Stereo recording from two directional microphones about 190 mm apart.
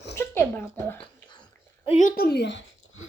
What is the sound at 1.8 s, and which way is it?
Speech, 35° left (ahead or behind).